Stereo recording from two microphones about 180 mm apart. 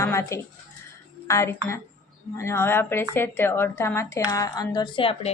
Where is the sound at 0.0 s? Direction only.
15° left (ahead or behind).